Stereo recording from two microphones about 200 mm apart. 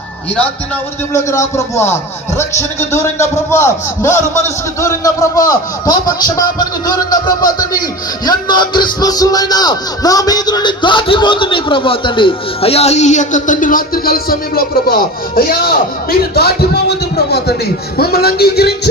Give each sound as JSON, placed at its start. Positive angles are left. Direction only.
{"t": 1.1, "sound": "a man's voice", "side_deg": 15}